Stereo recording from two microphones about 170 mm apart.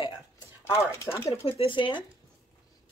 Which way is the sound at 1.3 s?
35° left (ahead or behind).